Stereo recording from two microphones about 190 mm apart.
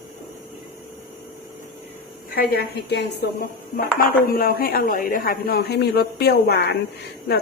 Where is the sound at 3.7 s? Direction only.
45° left (ahead or behind).